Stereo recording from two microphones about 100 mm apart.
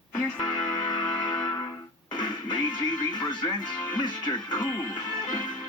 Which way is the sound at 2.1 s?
50° left (ahead or behind).